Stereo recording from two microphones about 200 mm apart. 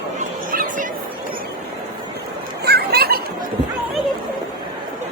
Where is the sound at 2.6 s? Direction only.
55° right (ahead or behind).